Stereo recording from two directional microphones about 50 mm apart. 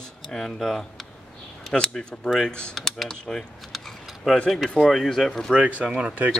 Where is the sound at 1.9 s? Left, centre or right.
Centre.